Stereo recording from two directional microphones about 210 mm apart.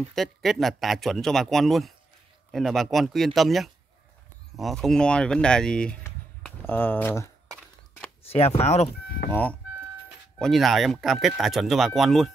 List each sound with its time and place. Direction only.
0.1 s speech: centre (ahead or behind)
8.2 s speech: 30° left (ahead or behind)
9.3 s speech: 5° left (ahead or behind)